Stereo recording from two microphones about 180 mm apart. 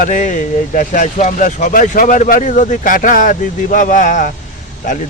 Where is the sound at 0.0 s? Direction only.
45° left (ahead or behind).